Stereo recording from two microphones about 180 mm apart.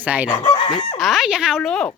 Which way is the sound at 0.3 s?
30° left (ahead or behind).